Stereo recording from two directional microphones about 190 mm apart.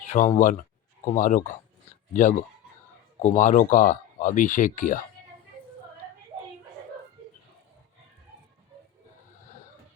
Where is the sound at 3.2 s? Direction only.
40° left (ahead or behind).